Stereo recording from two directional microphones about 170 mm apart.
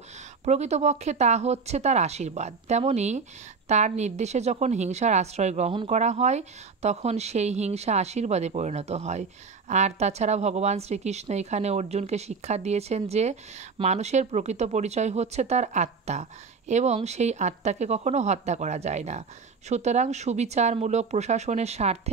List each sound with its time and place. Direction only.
0.5 s speech: 40° right (ahead or behind)